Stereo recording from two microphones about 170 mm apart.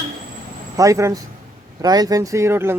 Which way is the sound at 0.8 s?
20° right (ahead or behind).